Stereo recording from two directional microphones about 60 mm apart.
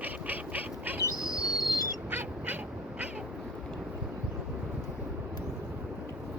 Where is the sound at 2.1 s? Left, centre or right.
Right.